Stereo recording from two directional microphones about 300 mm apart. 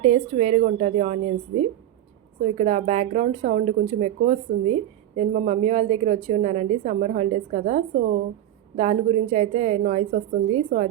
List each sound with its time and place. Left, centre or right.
0.0 s a woman's voice: right